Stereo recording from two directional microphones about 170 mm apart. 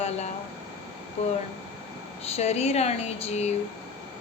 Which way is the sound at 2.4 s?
40° left (ahead or behind).